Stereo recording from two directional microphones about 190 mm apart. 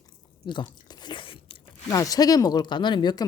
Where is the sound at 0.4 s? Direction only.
25° left (ahead or behind).